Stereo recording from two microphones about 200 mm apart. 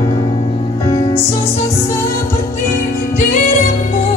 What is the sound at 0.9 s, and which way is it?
Music, 25° left (ahead or behind).